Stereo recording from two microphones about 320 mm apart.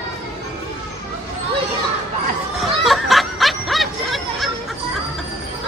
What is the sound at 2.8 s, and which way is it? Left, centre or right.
Snicker, centre.